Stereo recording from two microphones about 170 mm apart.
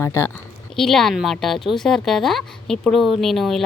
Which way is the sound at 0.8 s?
Centre (ahead or behind).